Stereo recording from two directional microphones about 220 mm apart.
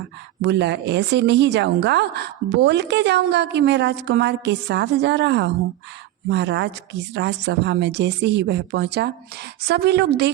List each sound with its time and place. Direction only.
0.4 s speech: 50° right (ahead or behind)